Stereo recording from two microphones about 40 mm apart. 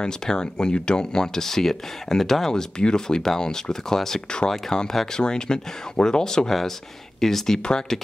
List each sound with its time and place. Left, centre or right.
0.0 s speech: centre